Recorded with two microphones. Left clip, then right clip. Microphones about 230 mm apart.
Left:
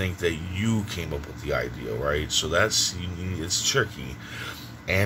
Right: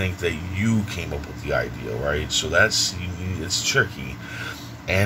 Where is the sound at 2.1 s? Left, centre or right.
Left.